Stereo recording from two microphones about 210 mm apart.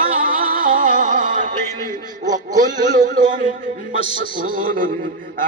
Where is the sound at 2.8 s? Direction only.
40° right (ahead or behind).